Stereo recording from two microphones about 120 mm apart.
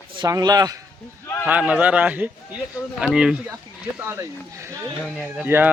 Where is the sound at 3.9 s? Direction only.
25° right (ahead or behind).